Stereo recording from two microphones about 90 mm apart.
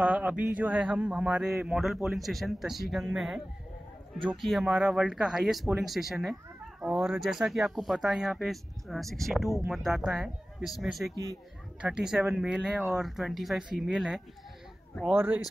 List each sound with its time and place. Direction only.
0.0 s a man's voice: 15° right (ahead or behind)
15.1 s speech: 20° right (ahead or behind)